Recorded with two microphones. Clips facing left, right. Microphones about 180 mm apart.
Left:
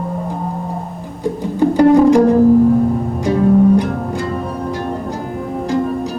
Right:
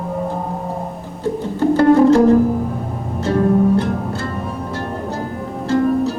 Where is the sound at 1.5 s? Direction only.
15° left (ahead or behind).